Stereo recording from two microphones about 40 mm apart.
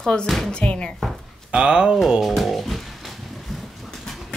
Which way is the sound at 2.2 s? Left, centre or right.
Centre.